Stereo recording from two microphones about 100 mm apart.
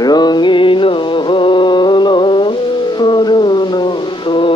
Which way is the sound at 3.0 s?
50° left (ahead or behind).